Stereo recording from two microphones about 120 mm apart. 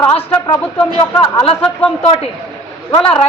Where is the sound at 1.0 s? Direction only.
45° left (ahead or behind).